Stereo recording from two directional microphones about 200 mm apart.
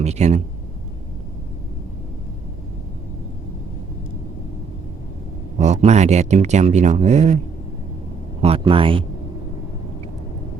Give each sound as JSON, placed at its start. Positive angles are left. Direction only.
{"t": 0.0, "sound": "speech", "side_deg": -35}
{"t": 5.5, "sound": "speech", "side_deg": -35}
{"t": 8.4, "sound": "speech", "side_deg": -30}